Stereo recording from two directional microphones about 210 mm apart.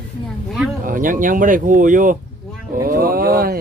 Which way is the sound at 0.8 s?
40° right (ahead or behind).